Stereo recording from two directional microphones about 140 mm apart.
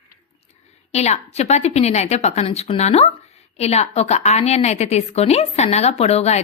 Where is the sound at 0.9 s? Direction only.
50° left (ahead or behind).